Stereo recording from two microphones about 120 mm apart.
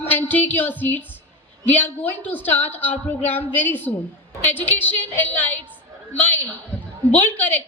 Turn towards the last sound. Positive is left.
turn(degrees=15)  # may be behind; listen again after turning